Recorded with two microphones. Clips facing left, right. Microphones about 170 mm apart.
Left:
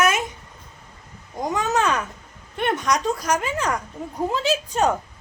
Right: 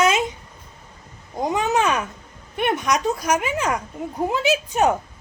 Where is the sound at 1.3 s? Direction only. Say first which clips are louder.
Right 2 dB; 10° right (ahead or behind).